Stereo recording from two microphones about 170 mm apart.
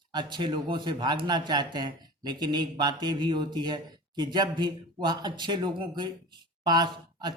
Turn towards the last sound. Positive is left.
turn(degrees=-25)  # may be behind; listen again after turning